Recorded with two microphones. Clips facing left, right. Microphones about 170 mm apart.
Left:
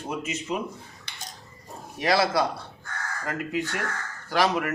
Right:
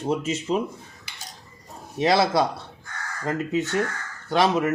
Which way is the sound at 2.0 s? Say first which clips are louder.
Right 3 dB; 25° right (ahead or behind).